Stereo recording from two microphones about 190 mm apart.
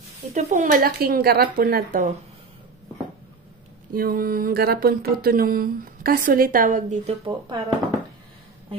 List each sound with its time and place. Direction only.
0.3 s speech: 40° right (ahead or behind)
3.9 s speech: 50° right (ahead or behind)
7.2 s speech: 25° right (ahead or behind)